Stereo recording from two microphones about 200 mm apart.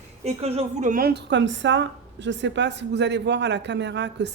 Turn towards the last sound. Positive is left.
turn(degrees=-60)  # may be behind; listen again after turning